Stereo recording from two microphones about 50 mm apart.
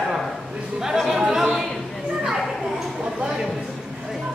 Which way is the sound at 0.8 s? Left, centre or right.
Centre.